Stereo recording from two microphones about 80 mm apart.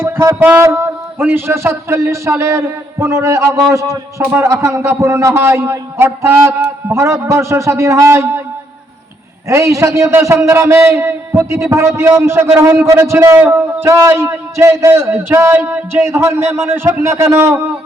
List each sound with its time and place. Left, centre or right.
0.0 s a man's voice: right
4.2 s a man's voice: right
4.4 s a man's voice: right
9.5 s a man's voice: right